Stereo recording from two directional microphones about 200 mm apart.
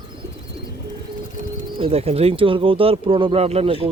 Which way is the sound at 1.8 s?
30° right (ahead or behind).